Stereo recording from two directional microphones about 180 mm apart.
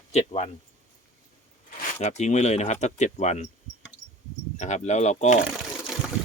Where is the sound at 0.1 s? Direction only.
40° left (ahead or behind).